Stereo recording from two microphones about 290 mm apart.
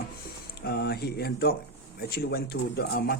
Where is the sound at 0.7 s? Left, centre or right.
Left.